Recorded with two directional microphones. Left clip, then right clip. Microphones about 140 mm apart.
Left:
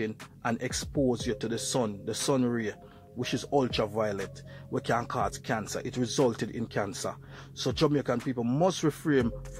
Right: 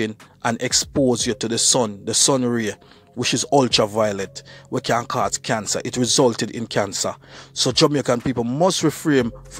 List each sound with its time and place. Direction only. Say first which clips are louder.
0.0 s speech: right 9 dB; 35° right (ahead or behind)